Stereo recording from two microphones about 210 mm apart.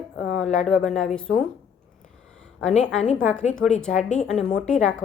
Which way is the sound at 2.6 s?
35° left (ahead or behind).